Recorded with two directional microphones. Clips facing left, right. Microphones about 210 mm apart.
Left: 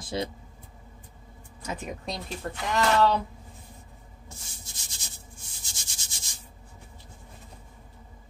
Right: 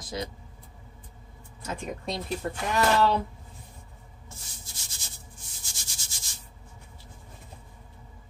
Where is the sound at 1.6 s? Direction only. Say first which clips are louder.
Right 1 dB; centre (ahead or behind).